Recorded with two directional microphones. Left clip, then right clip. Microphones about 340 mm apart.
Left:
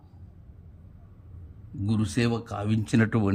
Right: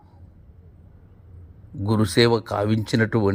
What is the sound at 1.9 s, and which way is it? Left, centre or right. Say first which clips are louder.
Speech: right 10 dB; centre.